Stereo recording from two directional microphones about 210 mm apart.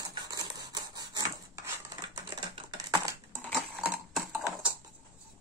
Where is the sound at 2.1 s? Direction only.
20° right (ahead or behind).